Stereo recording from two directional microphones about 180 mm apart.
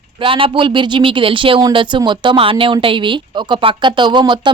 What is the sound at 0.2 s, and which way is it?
Speech, 30° right (ahead or behind).